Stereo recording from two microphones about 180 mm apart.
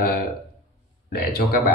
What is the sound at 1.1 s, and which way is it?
Speech, 60° left (ahead or behind).